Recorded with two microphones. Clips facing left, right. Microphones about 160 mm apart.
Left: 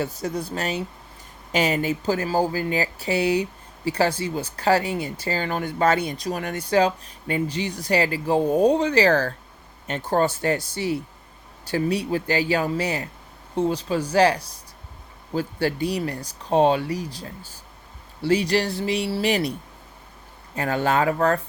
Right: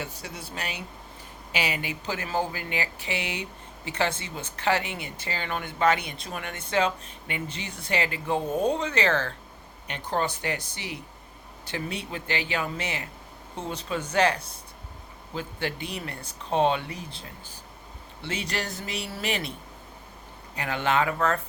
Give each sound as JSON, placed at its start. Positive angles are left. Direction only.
{"t": 0.0, "sound": "speech", "side_deg": 40}
{"t": 10.6, "sound": "speech", "side_deg": -20}
{"t": 11.6, "sound": "speech", "side_deg": 40}
{"t": 17.1, "sound": "speech", "side_deg": -25}
{"t": 18.2, "sound": "speech", "side_deg": 35}
{"t": 20.6, "sound": "speech", "side_deg": 40}